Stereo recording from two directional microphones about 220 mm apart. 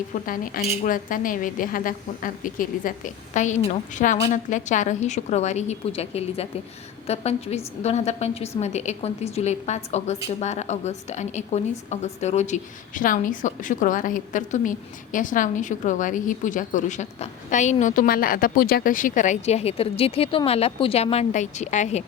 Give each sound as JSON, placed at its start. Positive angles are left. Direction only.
{"t": 0.3, "sound": "a woman's voice", "side_deg": 40}